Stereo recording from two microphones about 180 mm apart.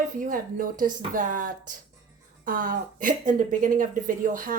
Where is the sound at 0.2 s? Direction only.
50° right (ahead or behind).